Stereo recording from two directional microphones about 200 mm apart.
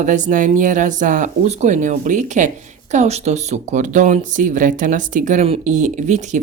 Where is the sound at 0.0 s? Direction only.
40° right (ahead or behind).